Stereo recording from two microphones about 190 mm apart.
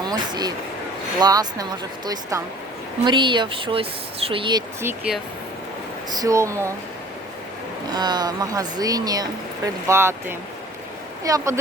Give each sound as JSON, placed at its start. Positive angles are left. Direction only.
{"t": 0.0, "sound": "speech", "side_deg": -20}
{"t": 4.8, "sound": "speech", "side_deg": -10}
{"t": 7.9, "sound": "speech", "side_deg": -20}